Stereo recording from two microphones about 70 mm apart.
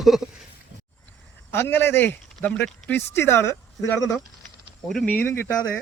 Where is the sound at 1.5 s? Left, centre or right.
Left.